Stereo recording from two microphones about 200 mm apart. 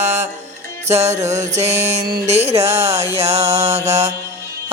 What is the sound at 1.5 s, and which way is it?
Music, 30° right (ahead or behind).